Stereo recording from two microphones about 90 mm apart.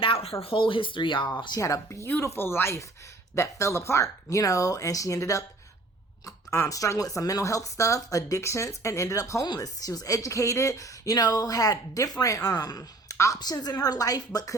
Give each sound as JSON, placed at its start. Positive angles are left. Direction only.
{"t": 0.4, "sound": "speech", "side_deg": 75}
{"t": 1.5, "sound": "a woman's voice", "side_deg": 35}